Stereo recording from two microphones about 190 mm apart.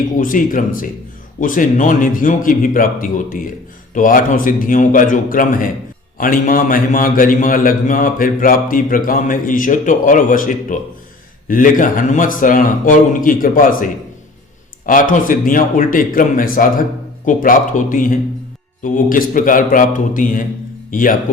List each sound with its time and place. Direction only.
0.2 s a man's voice: 45° left (ahead or behind)
15.1 s a man's voice: 45° left (ahead or behind)